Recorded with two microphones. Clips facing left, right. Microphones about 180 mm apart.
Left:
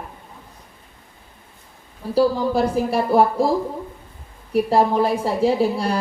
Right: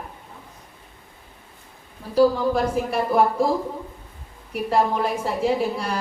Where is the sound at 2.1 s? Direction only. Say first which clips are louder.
Even; 30° left (ahead or behind).